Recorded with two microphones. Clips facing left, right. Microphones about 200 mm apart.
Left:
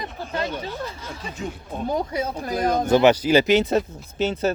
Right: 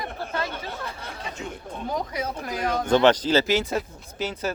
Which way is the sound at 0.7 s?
60° right (ahead or behind).